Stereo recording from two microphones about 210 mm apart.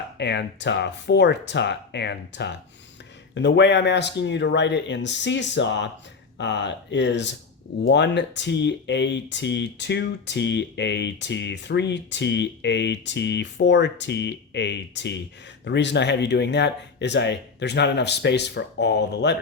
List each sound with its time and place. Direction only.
0.2 s speech: 55° left (ahead or behind)